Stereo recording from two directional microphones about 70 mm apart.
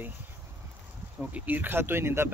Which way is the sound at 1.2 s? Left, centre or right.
Right.